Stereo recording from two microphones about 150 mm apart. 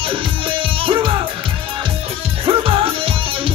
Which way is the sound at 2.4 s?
40° right (ahead or behind).